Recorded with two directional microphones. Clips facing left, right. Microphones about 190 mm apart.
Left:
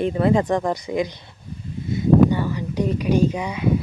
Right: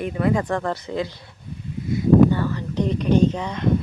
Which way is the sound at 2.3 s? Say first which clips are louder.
Even; 15° left (ahead or behind).